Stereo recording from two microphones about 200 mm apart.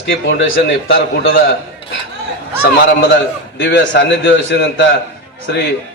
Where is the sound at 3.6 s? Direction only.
60° left (ahead or behind).